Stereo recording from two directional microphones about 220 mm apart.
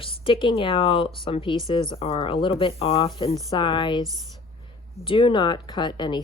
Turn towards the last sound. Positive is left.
turn(degrees=20)  # may be behind; listen again after turning